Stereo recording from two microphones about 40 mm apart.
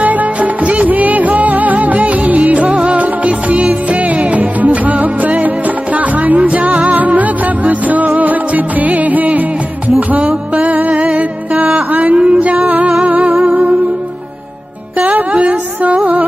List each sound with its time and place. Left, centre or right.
0.0 s music: right
12.2 s a sound: right
13.0 s music: right
15.3 s music: right